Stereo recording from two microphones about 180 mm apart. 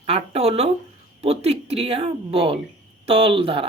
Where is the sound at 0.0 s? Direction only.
35° right (ahead or behind).